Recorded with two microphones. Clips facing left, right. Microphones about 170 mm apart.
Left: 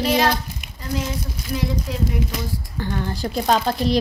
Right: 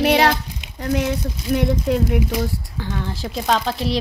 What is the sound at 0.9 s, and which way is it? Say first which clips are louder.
Child singing: right 3 dB; 60° right (ahead or behind).